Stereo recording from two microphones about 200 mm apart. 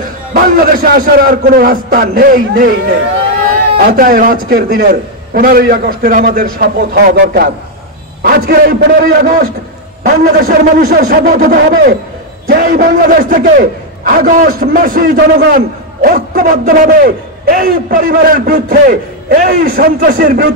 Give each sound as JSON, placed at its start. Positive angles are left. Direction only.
{"t": 0.3, "sound": "a man's voice", "side_deg": -45}
{"t": 3.8, "sound": "a man's voice", "side_deg": -45}